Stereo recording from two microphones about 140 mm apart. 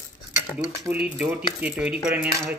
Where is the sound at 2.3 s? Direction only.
20° right (ahead or behind).